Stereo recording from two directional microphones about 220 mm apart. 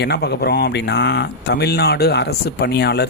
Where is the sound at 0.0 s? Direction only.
50° left (ahead or behind).